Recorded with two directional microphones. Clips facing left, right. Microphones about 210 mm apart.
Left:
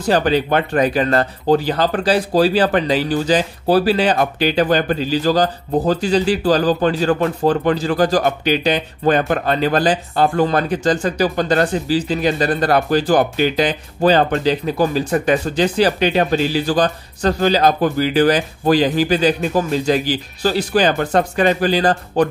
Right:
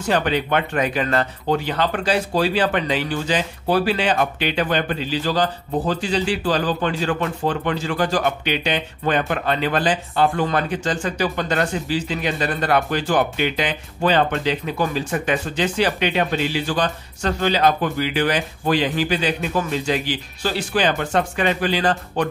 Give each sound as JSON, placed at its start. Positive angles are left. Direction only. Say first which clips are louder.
{"t": 0.0, "sound": "speech", "louder": "left 5 dB", "side_deg": 35}